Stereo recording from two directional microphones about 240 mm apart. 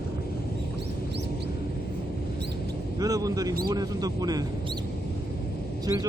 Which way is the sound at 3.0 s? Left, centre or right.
Centre.